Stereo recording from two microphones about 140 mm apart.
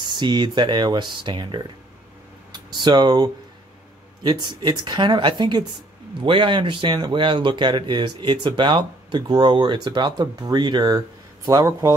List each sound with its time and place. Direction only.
0.0 s speech: 30° right (ahead or behind)